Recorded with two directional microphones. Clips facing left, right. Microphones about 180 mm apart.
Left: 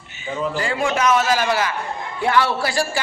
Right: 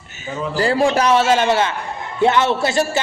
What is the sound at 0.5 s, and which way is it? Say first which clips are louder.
A man's voice: right 9 dB; 35° right (ahead or behind).